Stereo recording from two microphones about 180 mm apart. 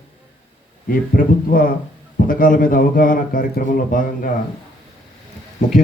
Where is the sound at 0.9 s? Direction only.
50° left (ahead or behind).